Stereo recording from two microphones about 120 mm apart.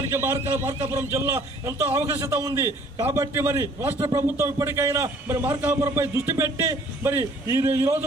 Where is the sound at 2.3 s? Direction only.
25° right (ahead or behind).